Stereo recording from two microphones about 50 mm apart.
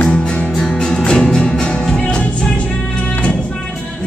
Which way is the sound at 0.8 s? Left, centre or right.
Centre.